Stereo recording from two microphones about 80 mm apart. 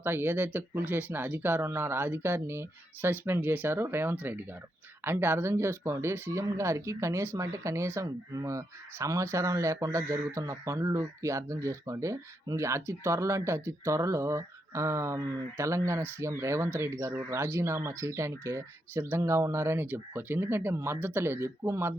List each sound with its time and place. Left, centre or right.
0.0 s speech: right